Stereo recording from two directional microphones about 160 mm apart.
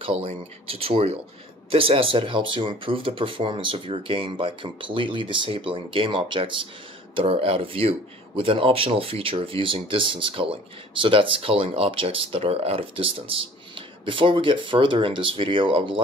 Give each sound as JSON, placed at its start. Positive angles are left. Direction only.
{"t": 0.0, "sound": "speech", "side_deg": -35}